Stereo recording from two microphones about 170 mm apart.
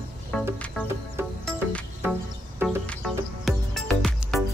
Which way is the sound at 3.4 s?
Centre (ahead or behind).